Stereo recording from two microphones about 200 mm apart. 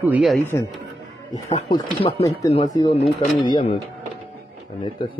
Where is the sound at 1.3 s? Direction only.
20° left (ahead or behind).